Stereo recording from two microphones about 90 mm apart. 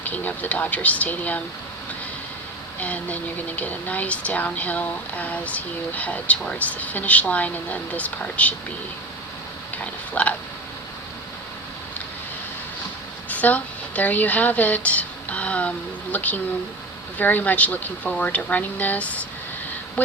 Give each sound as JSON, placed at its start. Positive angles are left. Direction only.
{"t": 0.0, "sound": "speech", "side_deg": 20}
{"t": 2.8, "sound": "speech", "side_deg": 15}
{"t": 9.7, "sound": "speech", "side_deg": 15}
{"t": 13.2, "sound": "speech", "side_deg": 15}